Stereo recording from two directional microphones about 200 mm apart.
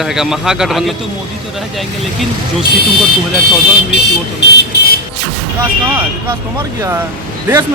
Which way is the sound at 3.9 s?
55° left (ahead or behind).